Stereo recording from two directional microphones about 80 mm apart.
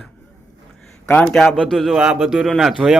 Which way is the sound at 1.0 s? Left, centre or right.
Centre.